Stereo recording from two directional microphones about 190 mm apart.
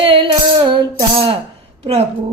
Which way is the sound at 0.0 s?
25° right (ahead or behind).